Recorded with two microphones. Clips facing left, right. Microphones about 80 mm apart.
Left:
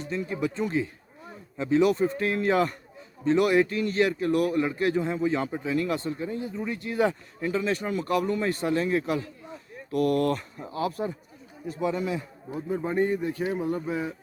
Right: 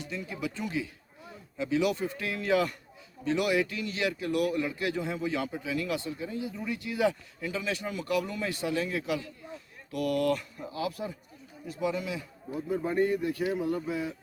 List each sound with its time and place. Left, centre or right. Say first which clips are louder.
0.0 s a man's voice: left 6 dB; left
12.5 s a man's voice: left 1 dB; left